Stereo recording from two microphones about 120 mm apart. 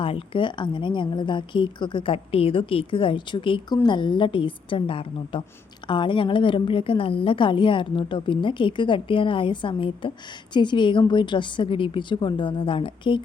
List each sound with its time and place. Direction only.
0.0 s a woman's voice: 45° left (ahead or behind)